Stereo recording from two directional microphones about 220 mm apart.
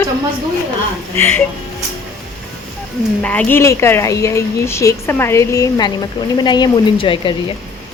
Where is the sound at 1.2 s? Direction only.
10° left (ahead or behind).